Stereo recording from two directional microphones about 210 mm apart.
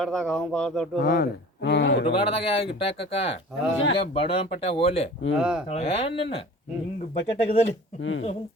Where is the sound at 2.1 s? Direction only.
25° left (ahead or behind).